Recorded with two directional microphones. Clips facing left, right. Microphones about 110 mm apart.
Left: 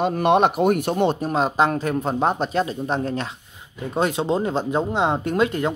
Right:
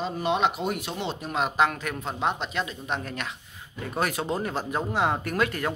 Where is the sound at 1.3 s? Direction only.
30° left (ahead or behind).